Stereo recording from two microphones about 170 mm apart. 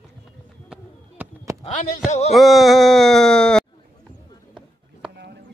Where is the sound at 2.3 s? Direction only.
Centre (ahead or behind).